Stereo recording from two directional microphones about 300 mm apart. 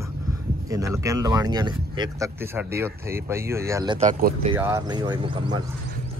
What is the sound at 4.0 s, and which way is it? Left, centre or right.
Speech, right.